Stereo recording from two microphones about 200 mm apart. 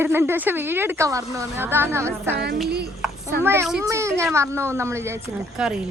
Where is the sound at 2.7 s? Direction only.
55° right (ahead or behind).